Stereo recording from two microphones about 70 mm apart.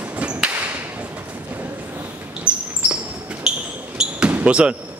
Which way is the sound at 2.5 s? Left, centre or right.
Centre.